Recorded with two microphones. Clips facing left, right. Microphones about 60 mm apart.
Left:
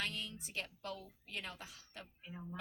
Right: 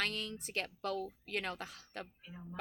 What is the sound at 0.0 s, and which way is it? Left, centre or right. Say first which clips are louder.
A woman's voice: right 4 dB; right.